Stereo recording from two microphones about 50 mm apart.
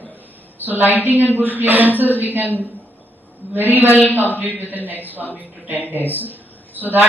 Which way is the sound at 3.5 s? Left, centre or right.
Right.